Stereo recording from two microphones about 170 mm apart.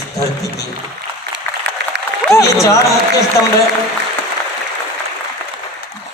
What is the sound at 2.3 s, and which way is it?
Speech, 15° left (ahead or behind).